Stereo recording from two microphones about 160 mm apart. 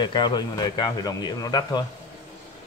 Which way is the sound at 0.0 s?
30° left (ahead or behind).